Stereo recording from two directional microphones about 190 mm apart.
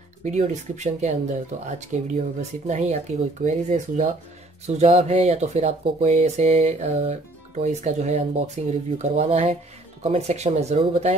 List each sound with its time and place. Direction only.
0.2 s speech: 40° right (ahead or behind)